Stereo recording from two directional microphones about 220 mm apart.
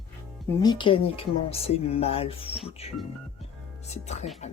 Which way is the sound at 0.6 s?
20° left (ahead or behind).